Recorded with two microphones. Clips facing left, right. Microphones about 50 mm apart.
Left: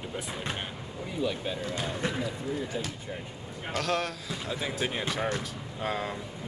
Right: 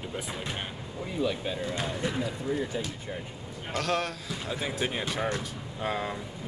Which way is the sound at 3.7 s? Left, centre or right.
Centre.